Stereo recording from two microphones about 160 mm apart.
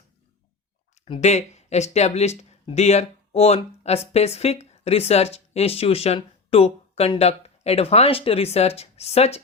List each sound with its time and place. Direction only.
1.0 s speech: 40° left (ahead or behind)